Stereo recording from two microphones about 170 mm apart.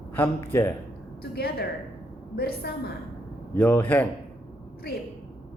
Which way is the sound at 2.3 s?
70° left (ahead or behind).